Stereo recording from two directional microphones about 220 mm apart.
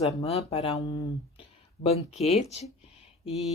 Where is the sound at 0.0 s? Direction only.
30° left (ahead or behind).